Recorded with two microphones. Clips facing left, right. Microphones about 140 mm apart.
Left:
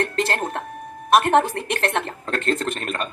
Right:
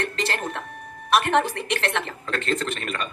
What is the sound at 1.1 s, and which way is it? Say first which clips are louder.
A woman's voice: left 4 dB; 45° left (ahead or behind).